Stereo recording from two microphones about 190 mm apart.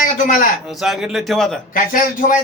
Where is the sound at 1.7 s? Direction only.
45° left (ahead or behind).